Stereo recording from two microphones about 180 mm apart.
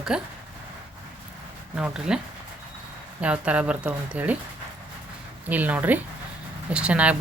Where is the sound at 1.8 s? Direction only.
5° right (ahead or behind).